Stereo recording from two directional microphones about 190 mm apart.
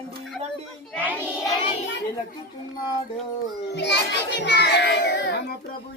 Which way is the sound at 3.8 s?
65° left (ahead or behind).